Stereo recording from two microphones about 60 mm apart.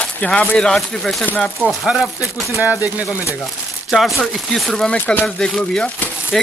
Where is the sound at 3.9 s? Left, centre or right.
Centre.